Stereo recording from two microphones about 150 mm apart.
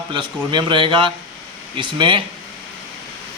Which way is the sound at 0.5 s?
35° right (ahead or behind).